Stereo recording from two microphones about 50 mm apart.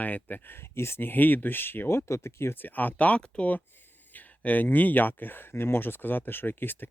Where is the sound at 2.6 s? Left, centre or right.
Left.